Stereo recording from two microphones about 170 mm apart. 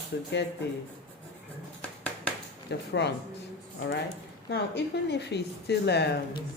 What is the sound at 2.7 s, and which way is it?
Speech, 90° left.